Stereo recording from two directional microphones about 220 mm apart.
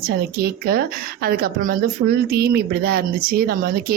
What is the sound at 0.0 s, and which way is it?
A woman's voice, 45° right (ahead or behind).